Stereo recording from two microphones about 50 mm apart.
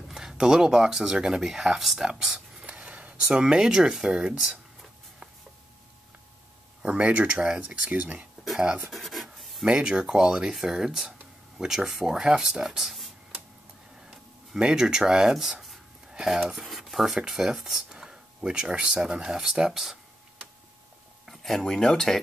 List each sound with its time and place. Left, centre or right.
0.1 s speech: centre
2.6 s a sound: right
3.2 s speech: centre
6.8 s speech: right
8.4 s a sound: centre
8.9 s rub: centre
9.7 s speech: centre
14.1 s speech: centre
21.3 s speech: centre